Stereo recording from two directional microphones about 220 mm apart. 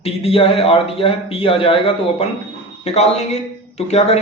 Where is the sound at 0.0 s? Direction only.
25° left (ahead or behind).